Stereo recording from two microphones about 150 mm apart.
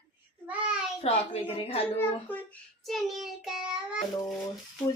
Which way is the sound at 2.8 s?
Centre (ahead or behind).